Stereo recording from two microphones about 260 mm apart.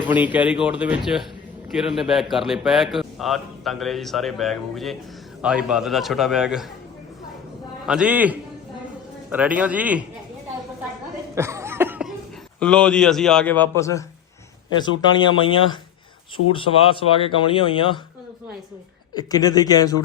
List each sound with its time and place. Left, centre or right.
0.0 s a man's voice: centre
7.9 s a man's voice: centre
11.3 s cough: centre
12.5 s a man's voice: centre
15.0 s speech: centre
19.1 s speech: centre